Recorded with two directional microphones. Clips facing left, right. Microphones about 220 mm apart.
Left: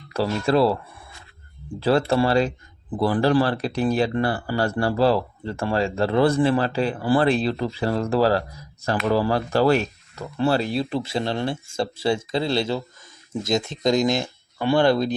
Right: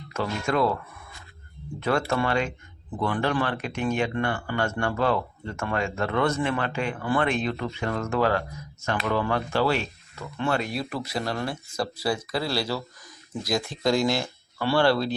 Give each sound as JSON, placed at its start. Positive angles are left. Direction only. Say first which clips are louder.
{"t": 0.1, "sound": "speech", "louder": "left 6 dB", "side_deg": 35}